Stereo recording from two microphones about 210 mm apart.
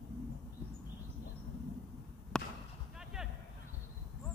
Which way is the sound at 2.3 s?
5° left (ahead or behind).